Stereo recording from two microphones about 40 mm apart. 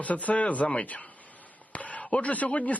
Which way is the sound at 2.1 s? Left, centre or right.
Left.